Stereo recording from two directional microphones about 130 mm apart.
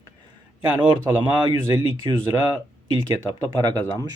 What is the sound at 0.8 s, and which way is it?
Speech, 40° right (ahead or behind).